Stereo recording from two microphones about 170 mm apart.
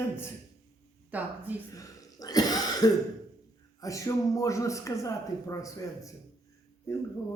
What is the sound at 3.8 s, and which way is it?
A man's voice, 20° left (ahead or behind).